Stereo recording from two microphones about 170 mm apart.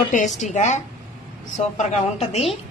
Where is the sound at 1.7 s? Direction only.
40° left (ahead or behind).